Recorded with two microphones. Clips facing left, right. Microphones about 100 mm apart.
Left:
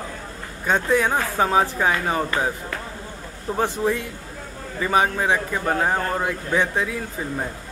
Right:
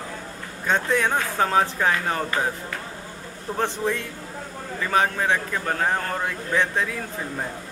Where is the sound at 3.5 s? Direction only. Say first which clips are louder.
Left 3 dB; 5° left (ahead or behind).